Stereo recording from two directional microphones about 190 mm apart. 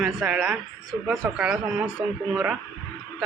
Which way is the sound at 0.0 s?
Centre (ahead or behind).